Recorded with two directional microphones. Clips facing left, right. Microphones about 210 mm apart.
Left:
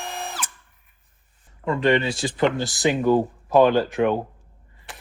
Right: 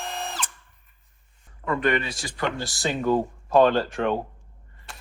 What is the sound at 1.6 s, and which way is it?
Speech, 25° left (ahead or behind).